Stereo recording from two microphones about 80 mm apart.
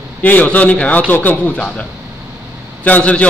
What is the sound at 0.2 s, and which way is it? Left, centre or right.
A man's voice, centre.